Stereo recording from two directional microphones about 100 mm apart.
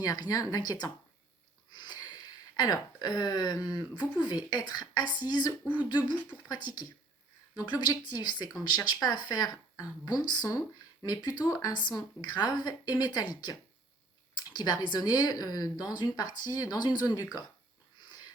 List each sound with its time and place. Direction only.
0.0 s speech: 40° left (ahead or behind)
1.7 s sniff: 45° left (ahead or behind)
2.6 s speech: 40° left (ahead or behind)
5.7 s speech: 15° right (ahead or behind)
6.1 s speech: 45° left (ahead or behind)
11.7 s speech: 45° left (ahead or behind)